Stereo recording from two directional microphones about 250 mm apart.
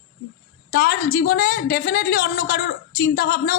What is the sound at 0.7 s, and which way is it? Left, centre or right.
A woman's voice, left.